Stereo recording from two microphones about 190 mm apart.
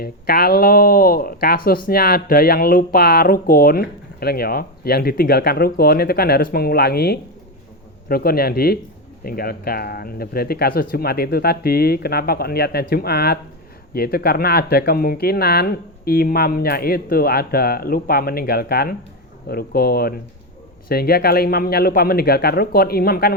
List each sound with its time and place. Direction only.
0.0 s speech: 50° left (ahead or behind)